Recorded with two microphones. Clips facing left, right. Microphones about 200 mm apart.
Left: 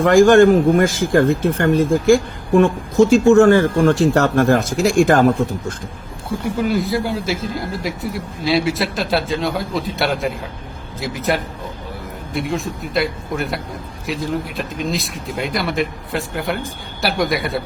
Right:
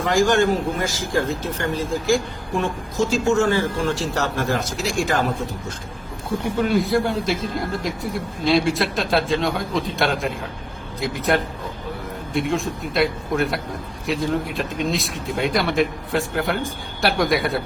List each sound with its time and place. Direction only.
0.0 s speech: 55° left (ahead or behind)
6.6 s speech: centre (ahead or behind)